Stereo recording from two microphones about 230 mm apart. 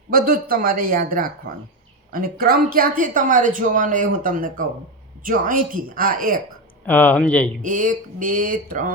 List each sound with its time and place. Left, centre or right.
0.1 s speech: right
6.8 s speech: centre
7.6 s speech: right